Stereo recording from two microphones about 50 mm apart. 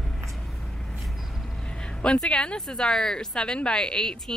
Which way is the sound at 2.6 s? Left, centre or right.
Centre.